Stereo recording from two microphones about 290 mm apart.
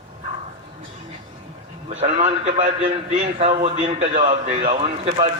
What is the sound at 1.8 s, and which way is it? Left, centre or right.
A man's voice, right.